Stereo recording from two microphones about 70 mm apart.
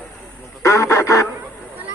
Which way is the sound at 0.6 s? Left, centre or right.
Left.